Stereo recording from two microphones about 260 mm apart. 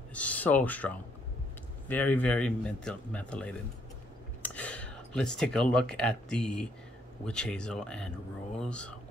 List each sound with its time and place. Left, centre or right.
0.1 s speech: centre